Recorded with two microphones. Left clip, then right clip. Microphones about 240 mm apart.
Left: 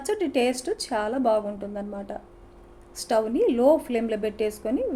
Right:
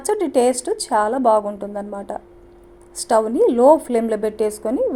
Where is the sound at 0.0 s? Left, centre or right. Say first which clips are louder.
Right 7 dB; right.